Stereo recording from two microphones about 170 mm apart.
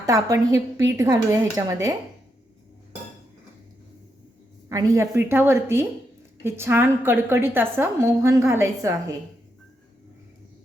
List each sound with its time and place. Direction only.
0.0 s speech: 20° right (ahead or behind)
4.7 s a woman's voice: 20° right (ahead or behind)